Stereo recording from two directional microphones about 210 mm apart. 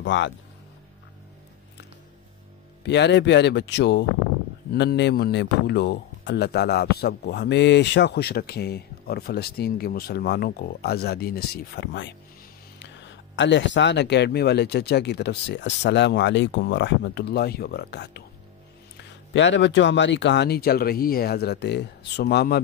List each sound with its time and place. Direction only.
0.0 s speech: 60° left (ahead or behind)
2.8 s a man's voice: 55° left (ahead or behind)
13.4 s speech: 60° left (ahead or behind)
19.3 s speech: 60° left (ahead or behind)